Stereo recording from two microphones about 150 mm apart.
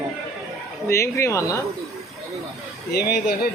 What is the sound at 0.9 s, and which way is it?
Speech, 20° left (ahead or behind).